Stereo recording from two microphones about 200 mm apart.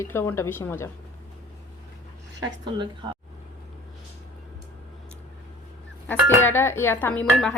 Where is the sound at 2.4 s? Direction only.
20° right (ahead or behind).